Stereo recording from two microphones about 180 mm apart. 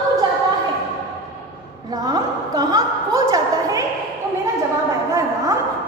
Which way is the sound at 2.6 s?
20° right (ahead or behind).